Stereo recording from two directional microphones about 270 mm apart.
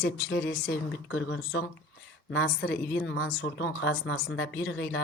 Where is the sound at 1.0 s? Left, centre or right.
Left.